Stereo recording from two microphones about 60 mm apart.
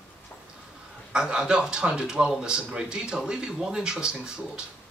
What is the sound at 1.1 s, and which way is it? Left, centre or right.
A man's voice, centre.